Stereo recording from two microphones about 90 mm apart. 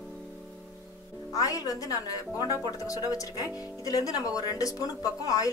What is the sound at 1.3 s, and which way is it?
Speech, 40° left (ahead or behind).